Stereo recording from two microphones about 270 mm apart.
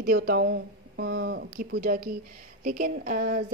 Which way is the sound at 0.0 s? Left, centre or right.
Right.